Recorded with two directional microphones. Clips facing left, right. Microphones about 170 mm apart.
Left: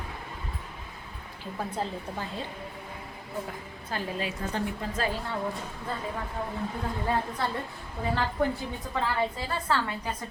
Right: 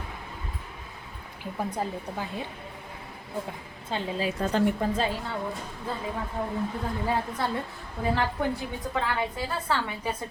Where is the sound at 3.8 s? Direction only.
25° right (ahead or behind).